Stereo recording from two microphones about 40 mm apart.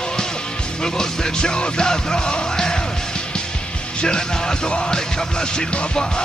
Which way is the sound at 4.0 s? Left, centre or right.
Left.